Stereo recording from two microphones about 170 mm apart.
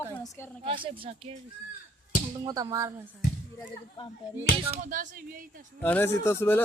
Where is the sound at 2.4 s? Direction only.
25° right (ahead or behind).